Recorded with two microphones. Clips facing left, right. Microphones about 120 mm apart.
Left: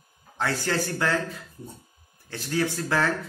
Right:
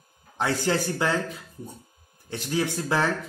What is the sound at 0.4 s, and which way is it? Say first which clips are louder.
Speech: right 2 dB; 20° right (ahead or behind).